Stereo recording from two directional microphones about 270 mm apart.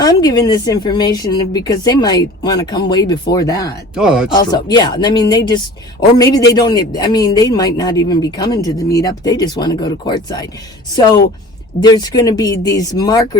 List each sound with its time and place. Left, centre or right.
0.0 s a man's voice: centre
3.9 s speech: centre
4.5 s a man's voice: centre
11.8 s a man's voice: centre